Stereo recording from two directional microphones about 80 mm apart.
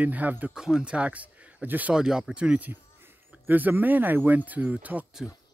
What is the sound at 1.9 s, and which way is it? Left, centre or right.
Speech, centre.